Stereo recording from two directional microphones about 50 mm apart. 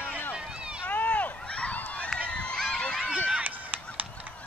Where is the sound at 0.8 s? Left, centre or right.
Left.